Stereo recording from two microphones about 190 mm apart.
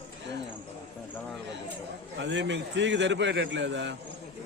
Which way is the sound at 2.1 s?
70° right (ahead or behind).